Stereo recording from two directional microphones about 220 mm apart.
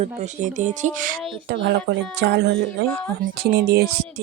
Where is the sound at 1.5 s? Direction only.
50° right (ahead or behind).